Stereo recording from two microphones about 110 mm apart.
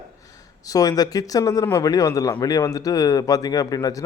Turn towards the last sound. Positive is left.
turn(degrees=35)  # may be behind; listen again after turning